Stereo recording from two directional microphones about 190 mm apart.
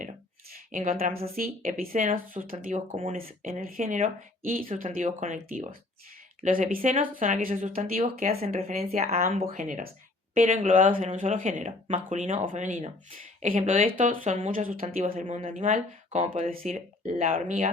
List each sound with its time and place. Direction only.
0.5 s speech: 45° right (ahead or behind)
8.8 s speech: 35° right (ahead or behind)